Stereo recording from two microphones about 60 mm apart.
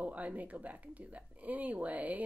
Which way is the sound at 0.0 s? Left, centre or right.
Right.